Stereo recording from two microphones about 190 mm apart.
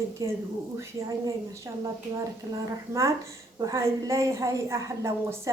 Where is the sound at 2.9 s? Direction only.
15° right (ahead or behind).